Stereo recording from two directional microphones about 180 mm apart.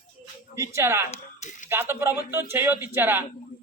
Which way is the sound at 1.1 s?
40° left (ahead or behind).